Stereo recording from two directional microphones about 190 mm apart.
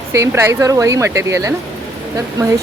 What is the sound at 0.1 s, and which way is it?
Speech, 15° right (ahead or behind).